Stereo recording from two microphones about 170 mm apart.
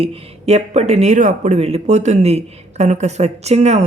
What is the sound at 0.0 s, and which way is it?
A woman's voice, 35° right (ahead or behind).